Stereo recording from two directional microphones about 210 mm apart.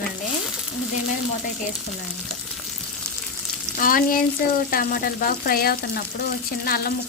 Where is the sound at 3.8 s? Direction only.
40° left (ahead or behind).